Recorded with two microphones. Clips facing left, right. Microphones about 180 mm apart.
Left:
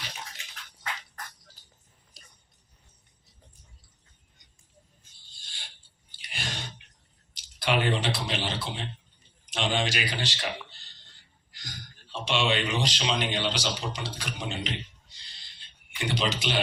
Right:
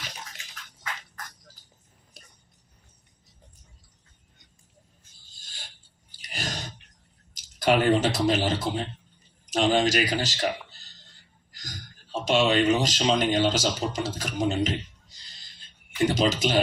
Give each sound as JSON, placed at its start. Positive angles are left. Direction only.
{"t": 2.2, "sound": "music", "side_deg": -55}
{"t": 5.3, "sound": "a sound", "side_deg": -45}
{"t": 7.3, "sound": "a man's voice", "side_deg": -45}